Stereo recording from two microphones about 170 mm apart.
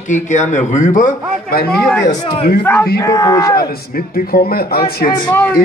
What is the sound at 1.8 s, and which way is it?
Speech, 5° left (ahead or behind).